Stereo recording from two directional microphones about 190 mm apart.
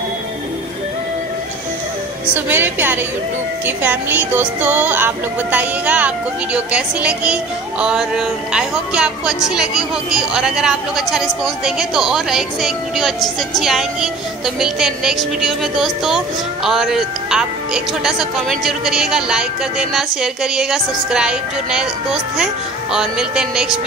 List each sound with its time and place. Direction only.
2.3 s speech: 10° right (ahead or behind)